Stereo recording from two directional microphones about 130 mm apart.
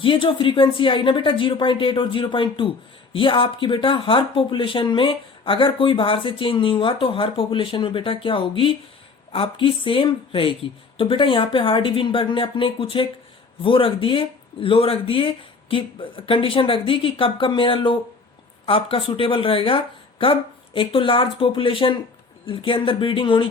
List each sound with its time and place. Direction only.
0.0 s speech: 40° left (ahead or behind)